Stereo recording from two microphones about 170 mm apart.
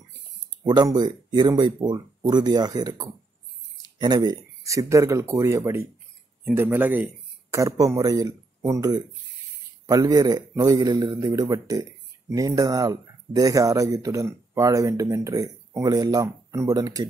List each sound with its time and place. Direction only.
0.7 s a man's voice: 25° right (ahead or behind)